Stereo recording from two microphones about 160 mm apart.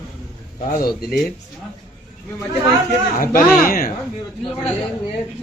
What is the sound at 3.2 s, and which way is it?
Speech, 65° left (ahead or behind).